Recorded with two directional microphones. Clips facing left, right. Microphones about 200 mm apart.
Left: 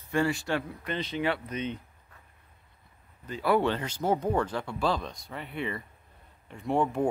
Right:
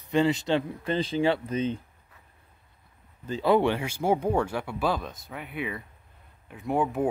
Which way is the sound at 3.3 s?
20° right (ahead or behind).